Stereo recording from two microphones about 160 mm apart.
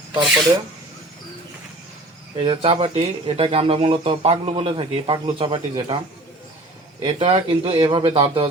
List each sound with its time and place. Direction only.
2.4 s speech: 35° right (ahead or behind)
7.0 s speech: 40° right (ahead or behind)